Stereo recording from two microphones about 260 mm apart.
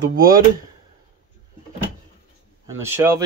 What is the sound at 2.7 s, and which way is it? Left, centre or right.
Speech, centre.